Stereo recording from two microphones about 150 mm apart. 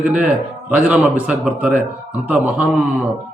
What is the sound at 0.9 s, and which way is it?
A man's voice, 10° right (ahead or behind).